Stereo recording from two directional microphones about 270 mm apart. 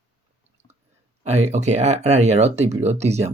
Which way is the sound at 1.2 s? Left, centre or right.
Right.